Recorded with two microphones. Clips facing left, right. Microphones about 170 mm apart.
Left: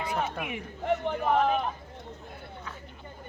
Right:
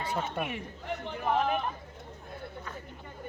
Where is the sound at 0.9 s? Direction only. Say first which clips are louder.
Left 9 dB; 55° left (ahead or behind).